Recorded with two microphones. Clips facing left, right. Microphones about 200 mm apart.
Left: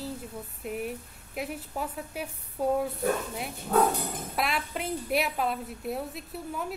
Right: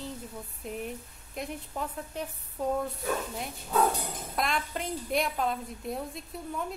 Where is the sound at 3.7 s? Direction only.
60° left (ahead or behind).